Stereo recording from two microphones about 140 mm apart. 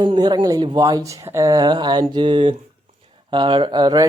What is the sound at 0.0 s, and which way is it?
Speech, 35° right (ahead or behind).